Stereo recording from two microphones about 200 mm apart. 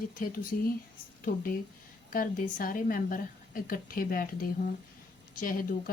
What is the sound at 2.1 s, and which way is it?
Speech, 45° left (ahead or behind).